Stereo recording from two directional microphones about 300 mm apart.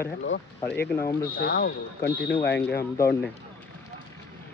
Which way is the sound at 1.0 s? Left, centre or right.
Centre.